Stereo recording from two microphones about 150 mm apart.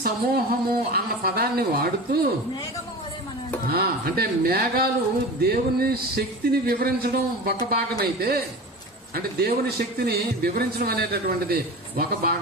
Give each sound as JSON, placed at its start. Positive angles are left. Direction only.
{"t": 0.0, "sound": "a man's voice", "side_deg": -85}
{"t": 3.7, "sound": "a man's voice", "side_deg": -90}